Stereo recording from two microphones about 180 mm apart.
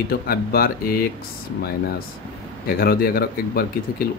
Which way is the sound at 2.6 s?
60° left (ahead or behind).